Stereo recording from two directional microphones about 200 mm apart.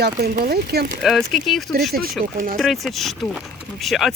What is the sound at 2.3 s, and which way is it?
Speech, 45° right (ahead or behind).